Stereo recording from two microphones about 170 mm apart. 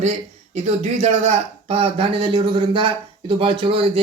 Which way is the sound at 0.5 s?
40° right (ahead or behind).